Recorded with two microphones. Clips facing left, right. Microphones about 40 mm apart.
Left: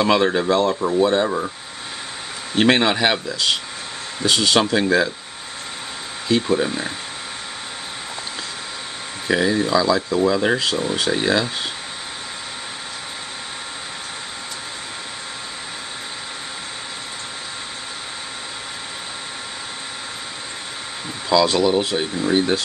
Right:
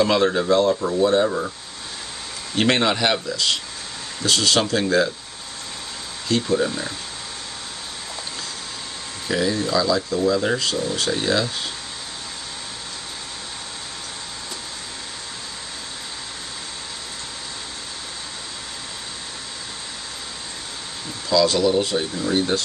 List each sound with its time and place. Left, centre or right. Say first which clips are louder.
0.0 s speech: left 1 dB; left
0.5 s speech: even; centre
2.5 s speech: left 3 dB; centre
6.2 s speech: left 2 dB; centre
9.3 s speech: left 3 dB; left
21.3 s speech: left 1 dB; left